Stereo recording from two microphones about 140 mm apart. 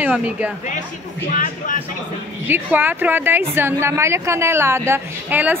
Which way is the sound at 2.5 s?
15° right (ahead or behind).